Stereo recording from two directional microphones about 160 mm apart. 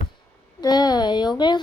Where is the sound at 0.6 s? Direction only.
25° left (ahead or behind).